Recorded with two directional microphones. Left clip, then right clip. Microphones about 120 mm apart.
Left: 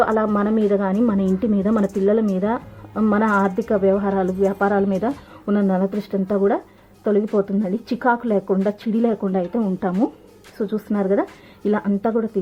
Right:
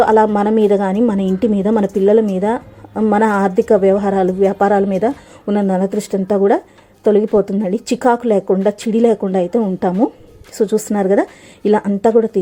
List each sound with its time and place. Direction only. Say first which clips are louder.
0.0 s a woman's voice: right 7 dB; 35° right (ahead or behind)